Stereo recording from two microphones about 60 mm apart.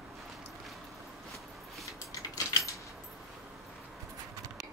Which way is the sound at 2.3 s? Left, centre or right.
Left.